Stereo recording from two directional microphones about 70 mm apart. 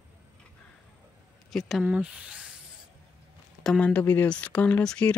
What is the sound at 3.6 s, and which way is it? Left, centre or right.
Speech, centre.